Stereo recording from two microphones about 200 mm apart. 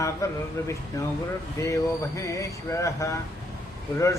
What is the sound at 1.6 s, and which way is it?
Speech, 15° left (ahead or behind).